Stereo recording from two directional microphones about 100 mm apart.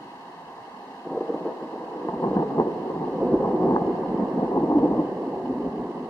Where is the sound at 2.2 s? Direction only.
25° left (ahead or behind).